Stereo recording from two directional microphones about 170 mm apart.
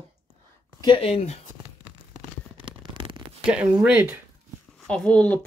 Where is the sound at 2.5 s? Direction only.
30° right (ahead or behind).